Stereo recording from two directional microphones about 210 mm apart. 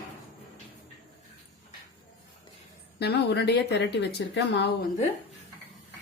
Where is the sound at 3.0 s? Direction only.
50° left (ahead or behind).